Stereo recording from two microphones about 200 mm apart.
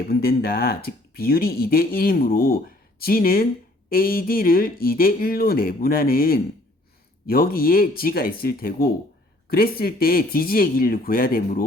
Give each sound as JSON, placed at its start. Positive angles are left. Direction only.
{"t": 0.1, "sound": "speech", "side_deg": 50}